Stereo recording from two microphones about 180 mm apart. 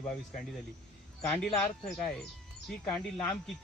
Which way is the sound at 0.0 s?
5° left (ahead or behind).